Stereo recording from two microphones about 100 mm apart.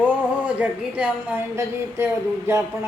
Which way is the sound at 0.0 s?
10° right (ahead or behind).